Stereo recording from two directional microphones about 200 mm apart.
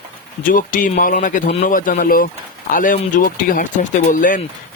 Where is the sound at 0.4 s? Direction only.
45° left (ahead or behind).